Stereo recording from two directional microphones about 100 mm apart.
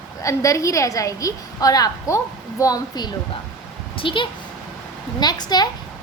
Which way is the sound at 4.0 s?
55° left (ahead or behind).